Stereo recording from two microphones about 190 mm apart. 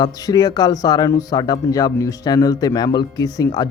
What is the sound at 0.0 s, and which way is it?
Speech, 20° left (ahead or behind).